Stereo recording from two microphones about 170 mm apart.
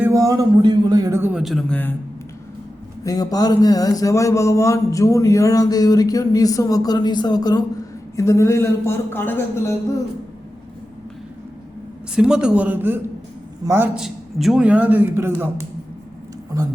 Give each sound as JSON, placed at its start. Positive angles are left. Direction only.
{"t": 0.0, "sound": "speech", "side_deg": -20}
{"t": 3.0, "sound": "a man's voice", "side_deg": 20}
{"t": 12.1, "sound": "a man's voice", "side_deg": -5}